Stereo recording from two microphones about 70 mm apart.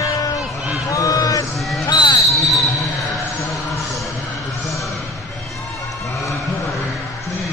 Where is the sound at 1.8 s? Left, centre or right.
Left.